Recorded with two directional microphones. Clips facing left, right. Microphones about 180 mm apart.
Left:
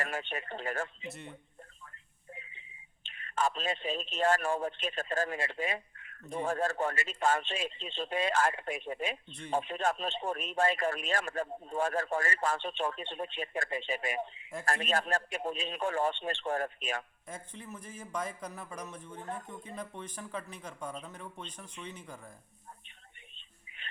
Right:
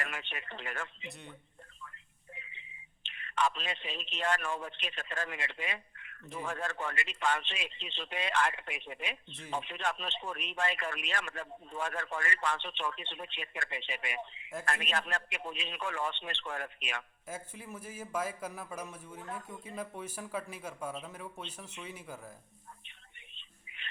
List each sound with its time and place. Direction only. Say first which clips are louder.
0.0 s speech: left 5 dB; 40° left (ahead or behind)
3.0 s a man's voice: even; 40° left (ahead or behind)
17.2 s a man's voice: right 1 dB; 5° right (ahead or behind)